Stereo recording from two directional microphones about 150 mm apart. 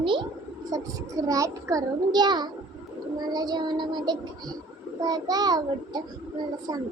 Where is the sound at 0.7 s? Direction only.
20° right (ahead or behind).